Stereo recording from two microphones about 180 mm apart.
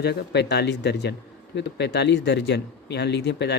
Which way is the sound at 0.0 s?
65° left (ahead or behind).